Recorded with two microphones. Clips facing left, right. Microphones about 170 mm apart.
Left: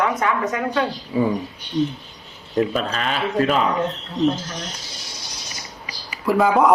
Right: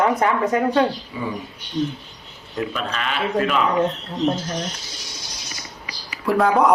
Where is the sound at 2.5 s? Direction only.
35° left (ahead or behind).